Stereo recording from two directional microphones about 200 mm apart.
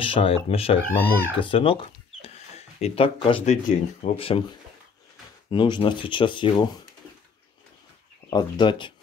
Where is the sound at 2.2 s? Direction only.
30° left (ahead or behind).